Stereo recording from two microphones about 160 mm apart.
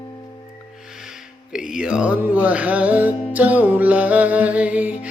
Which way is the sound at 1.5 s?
5° right (ahead or behind).